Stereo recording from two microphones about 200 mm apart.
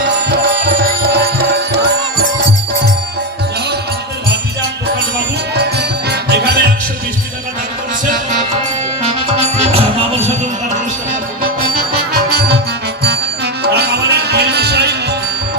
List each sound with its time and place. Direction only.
1.1 s music: 55° right (ahead or behind)
5.5 s music: 55° right (ahead or behind)
9.0 s music: 30° right (ahead or behind)
11.6 s music: 50° right (ahead or behind)